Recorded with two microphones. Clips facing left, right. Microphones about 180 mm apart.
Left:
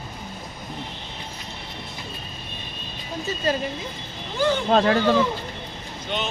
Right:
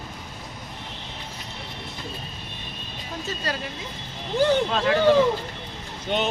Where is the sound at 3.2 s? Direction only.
20° left (ahead or behind).